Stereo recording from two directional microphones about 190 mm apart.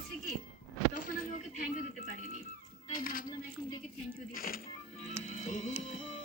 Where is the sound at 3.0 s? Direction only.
45° left (ahead or behind).